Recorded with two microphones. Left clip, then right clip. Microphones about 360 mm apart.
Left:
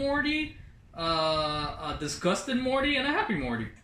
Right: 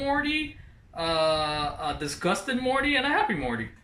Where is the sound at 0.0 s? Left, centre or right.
Right.